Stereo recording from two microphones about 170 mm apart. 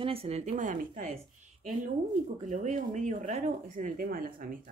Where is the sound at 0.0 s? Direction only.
35° right (ahead or behind).